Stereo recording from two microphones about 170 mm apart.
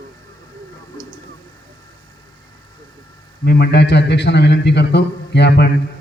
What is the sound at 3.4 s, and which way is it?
A man's voice, 70° left (ahead or behind).